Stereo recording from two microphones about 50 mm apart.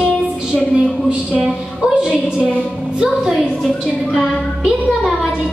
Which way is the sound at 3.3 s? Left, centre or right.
Centre.